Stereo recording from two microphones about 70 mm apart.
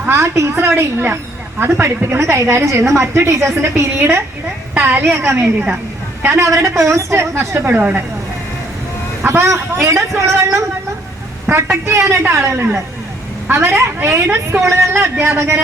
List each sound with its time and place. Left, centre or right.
0.1 s a woman's voice: right
9.2 s a woman's voice: right